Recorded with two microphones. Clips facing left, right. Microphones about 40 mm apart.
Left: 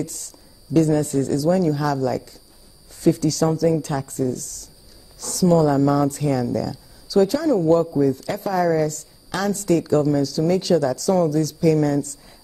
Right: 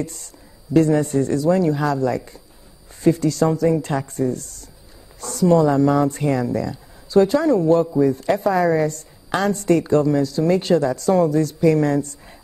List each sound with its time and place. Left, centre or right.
0.0 s a woman's voice: right